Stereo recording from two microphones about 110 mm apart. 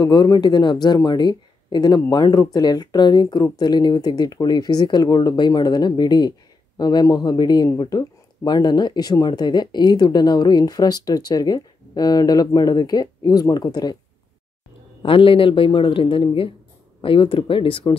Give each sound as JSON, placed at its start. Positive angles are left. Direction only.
{"t": 0.0, "sound": "speech", "side_deg": 40}
{"t": 15.0, "sound": "speech", "side_deg": 55}